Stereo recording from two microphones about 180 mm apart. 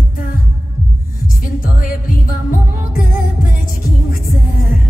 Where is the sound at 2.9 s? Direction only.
50° left (ahead or behind).